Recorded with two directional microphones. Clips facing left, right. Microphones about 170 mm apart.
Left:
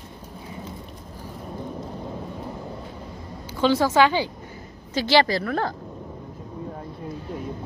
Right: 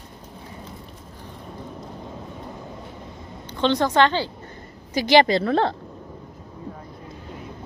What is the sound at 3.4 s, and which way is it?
Speech, 5° left (ahead or behind).